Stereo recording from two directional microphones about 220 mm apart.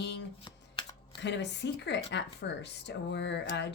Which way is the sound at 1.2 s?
55° left (ahead or behind).